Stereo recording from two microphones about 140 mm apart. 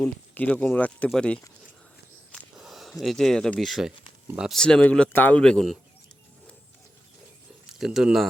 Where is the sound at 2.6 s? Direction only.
Centre (ahead or behind).